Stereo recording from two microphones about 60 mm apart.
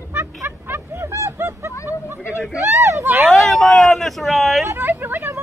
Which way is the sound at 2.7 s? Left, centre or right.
Right.